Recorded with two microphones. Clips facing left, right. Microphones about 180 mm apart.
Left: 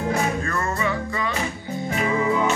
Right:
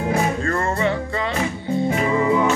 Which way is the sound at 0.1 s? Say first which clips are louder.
Right 3 dB; 30° right (ahead or behind).